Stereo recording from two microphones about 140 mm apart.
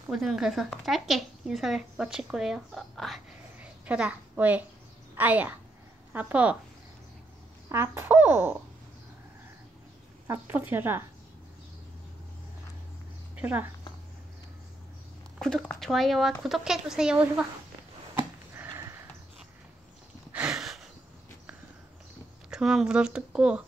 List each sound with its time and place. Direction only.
0.1 s speech: centre (ahead or behind)
3.8 s a woman's voice: 10° right (ahead or behind)
7.7 s speech: 15° right (ahead or behind)
10.2 s speech: 15° right (ahead or behind)
13.4 s speech: 10° right (ahead or behind)
15.3 s speech: 5° left (ahead or behind)
18.6 s horse: 20° right (ahead or behind)
20.3 s a sound: 5° right (ahead or behind)
22.5 s speech: 5° right (ahead or behind)